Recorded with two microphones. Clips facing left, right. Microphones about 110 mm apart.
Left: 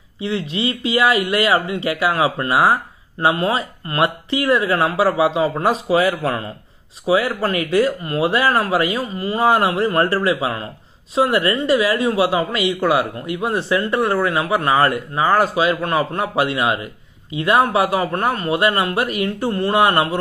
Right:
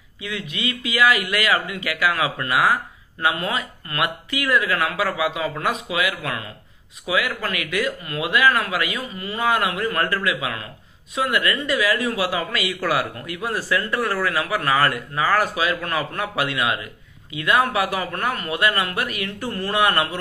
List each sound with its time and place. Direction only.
0.2 s speech: 30° left (ahead or behind)